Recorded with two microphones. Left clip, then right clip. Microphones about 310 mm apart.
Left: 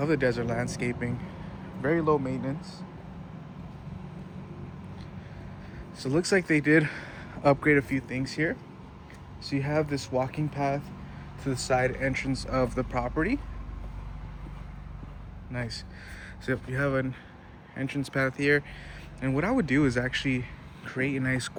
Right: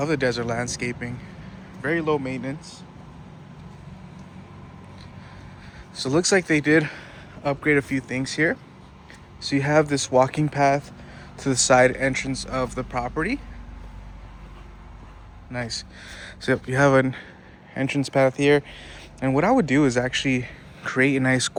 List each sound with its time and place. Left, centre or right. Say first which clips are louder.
0.0 s speech: right 3 dB; centre
6.0 s speech: right 5 dB; centre
15.5 s speech: right 6 dB; centre